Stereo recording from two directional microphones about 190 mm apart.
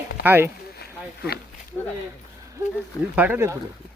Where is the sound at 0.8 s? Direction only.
55° left (ahead or behind).